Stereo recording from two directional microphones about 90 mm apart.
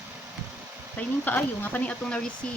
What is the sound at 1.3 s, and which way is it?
Speech, 20° left (ahead or behind).